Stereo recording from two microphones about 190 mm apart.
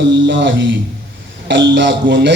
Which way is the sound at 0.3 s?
70° right (ahead or behind).